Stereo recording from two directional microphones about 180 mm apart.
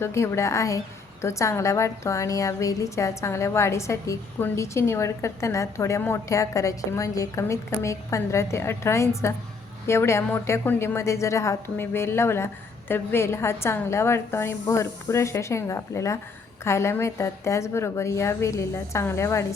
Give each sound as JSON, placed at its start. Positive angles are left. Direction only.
{"t": 0.0, "sound": "a woman's voice", "side_deg": 15}